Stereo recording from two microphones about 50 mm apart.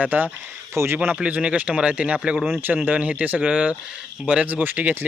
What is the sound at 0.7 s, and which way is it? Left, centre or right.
Speech, right.